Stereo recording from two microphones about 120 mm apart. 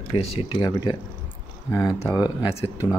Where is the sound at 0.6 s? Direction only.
35° left (ahead or behind).